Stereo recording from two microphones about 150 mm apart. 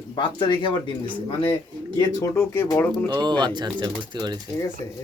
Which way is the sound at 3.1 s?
30° right (ahead or behind).